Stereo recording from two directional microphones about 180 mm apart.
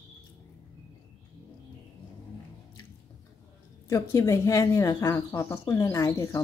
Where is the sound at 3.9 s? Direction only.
15° left (ahead or behind).